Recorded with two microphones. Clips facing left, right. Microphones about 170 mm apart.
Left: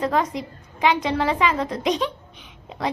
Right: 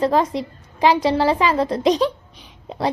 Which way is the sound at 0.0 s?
30° right (ahead or behind).